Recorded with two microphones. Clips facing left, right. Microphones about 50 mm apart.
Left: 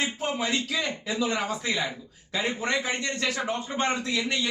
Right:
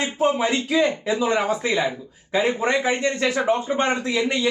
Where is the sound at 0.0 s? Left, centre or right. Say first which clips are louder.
Right 8 dB; right.